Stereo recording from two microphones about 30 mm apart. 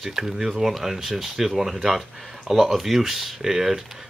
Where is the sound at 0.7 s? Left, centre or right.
Centre.